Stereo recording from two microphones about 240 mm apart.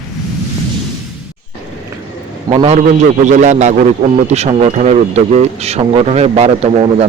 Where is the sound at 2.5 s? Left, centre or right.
Right.